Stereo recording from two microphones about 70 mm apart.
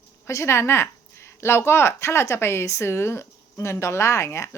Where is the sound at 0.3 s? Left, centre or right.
Left.